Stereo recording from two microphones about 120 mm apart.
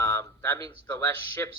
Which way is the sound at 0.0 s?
20° left (ahead or behind).